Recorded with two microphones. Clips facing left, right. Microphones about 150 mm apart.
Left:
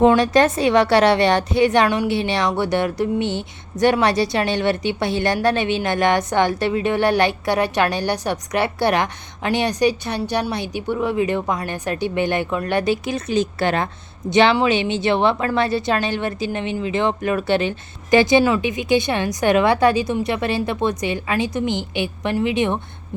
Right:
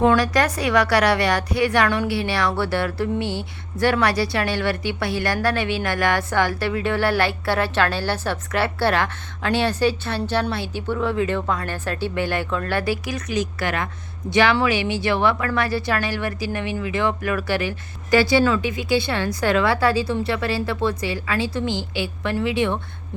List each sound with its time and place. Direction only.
0.0 s a woman's voice: 20° left (ahead or behind)